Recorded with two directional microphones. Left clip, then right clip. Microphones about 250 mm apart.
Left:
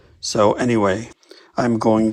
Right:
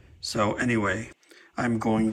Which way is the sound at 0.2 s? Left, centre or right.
Centre.